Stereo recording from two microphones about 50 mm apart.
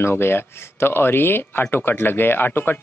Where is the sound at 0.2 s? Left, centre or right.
Left.